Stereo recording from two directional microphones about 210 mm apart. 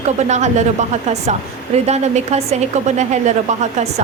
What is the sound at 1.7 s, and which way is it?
A woman's voice, 30° right (ahead or behind).